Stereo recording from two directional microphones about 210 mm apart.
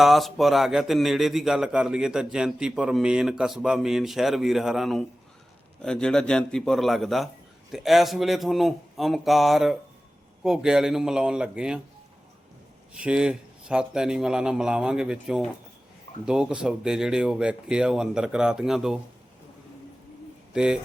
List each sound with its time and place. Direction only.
0.0 s a man's voice: centre (ahead or behind)
12.9 s a man's voice: 5° right (ahead or behind)
20.5 s speech: 5° right (ahead or behind)